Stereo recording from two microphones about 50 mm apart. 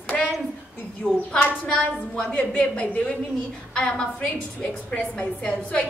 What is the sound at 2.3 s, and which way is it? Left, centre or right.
A woman's voice, left.